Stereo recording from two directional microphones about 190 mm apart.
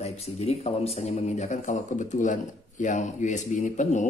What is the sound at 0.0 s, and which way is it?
Speech, 35° left (ahead or behind).